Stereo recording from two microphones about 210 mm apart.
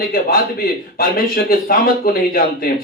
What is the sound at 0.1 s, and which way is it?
A man's voice, 45° left (ahead or behind).